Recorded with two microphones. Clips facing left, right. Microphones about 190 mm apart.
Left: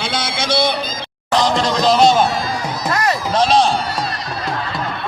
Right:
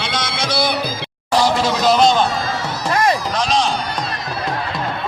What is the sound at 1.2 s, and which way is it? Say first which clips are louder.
Speech: even; 10° right (ahead or behind).